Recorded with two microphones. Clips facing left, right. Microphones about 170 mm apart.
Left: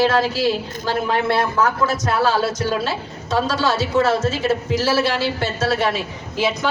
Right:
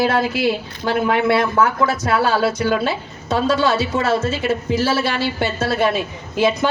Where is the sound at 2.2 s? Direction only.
60° right (ahead or behind).